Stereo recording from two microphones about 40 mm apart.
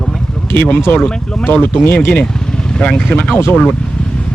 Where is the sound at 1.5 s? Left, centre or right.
Left.